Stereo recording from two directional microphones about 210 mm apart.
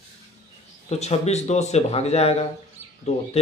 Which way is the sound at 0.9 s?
30° left (ahead or behind).